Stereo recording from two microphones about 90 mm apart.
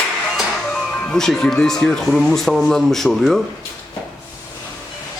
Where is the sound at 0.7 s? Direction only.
10° left (ahead or behind).